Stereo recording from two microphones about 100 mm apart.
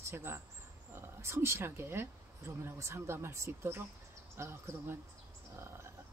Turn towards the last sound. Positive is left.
turn(degrees=-25)  # may be behind; listen again after turning